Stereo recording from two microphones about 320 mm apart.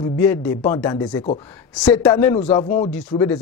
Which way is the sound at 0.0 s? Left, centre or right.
Centre.